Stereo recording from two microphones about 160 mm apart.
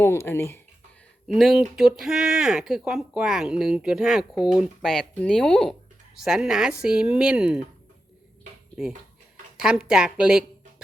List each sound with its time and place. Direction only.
0.0 s speech: 15° left (ahead or behind)
1.3 s speech: centre (ahead or behind)
8.8 s speech: 5° right (ahead or behind)